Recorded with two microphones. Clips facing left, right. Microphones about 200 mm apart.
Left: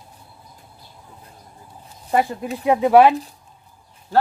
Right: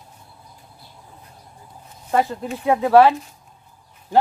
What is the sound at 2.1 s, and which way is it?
Speech, 10° left (ahead or behind).